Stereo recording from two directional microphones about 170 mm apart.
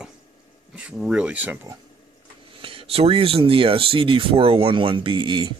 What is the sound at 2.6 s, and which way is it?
Speech, 30° right (ahead or behind).